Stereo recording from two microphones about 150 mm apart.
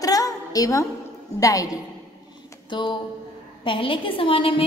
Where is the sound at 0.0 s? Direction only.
25° left (ahead or behind).